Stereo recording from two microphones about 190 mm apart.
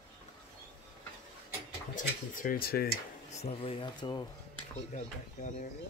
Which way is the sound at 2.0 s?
45° left (ahead or behind).